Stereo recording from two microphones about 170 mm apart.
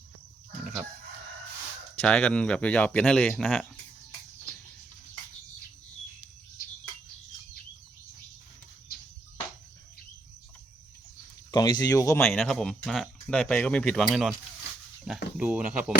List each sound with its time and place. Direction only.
2.0 s speech: 5° left (ahead or behind)
11.5 s speech: 20° left (ahead or behind)
12.2 s speech: centre (ahead or behind)
15.4 s speech: 10° right (ahead or behind)